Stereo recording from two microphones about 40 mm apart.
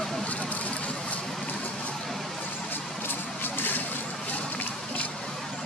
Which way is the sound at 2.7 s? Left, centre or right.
Left.